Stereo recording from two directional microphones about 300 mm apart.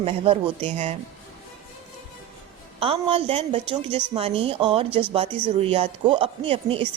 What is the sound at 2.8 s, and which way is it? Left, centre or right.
A woman's voice, centre.